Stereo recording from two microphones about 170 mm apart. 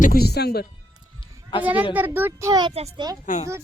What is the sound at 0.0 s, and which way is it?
Speech, 65° left (ahead or behind).